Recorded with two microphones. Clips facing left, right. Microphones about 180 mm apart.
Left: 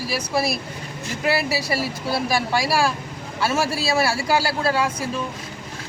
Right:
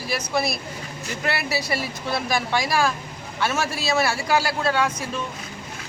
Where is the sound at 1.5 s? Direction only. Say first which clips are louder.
Left 2 dB; 5° left (ahead or behind).